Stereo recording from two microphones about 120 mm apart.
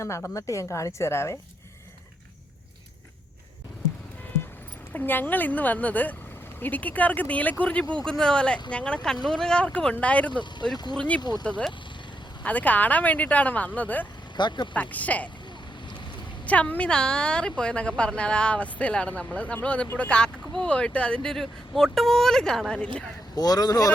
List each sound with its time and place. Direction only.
0.0 s a woman's voice: 25° left (ahead or behind)
4.9 s a woman's voice: 15° left (ahead or behind)
11.2 s speech: 35° left (ahead or behind)
11.4 s a woman's voice: 10° left (ahead or behind)
14.3 s speech: 40° left (ahead or behind)
14.7 s a woman's voice: 10° left (ahead or behind)
16.5 s a woman's voice: 10° left (ahead or behind)
23.3 s speech: 35° left (ahead or behind)